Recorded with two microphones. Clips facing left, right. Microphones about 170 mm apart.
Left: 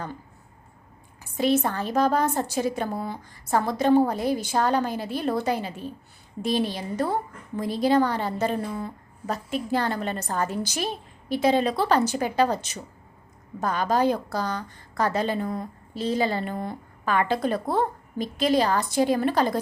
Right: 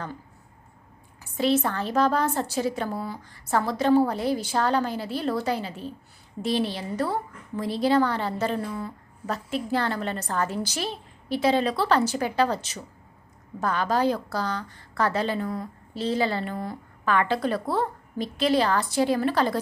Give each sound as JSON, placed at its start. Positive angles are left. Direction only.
{"t": 1.4, "sound": "a woman's voice", "side_deg": 15}
{"t": 13.6, "sound": "a woman's voice", "side_deg": 15}